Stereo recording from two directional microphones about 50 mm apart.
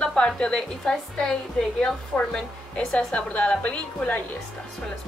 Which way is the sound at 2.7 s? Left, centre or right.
Left.